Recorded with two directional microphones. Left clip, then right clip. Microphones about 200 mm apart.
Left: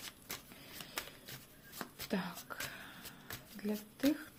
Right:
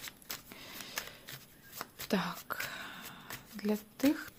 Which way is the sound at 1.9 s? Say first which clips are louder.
Right 7 dB; 25° right (ahead or behind).